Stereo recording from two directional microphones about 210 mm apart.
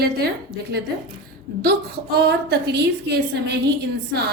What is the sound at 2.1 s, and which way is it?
Speech, 50° right (ahead or behind).